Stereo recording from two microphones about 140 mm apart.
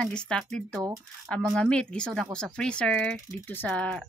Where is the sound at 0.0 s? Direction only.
5° left (ahead or behind).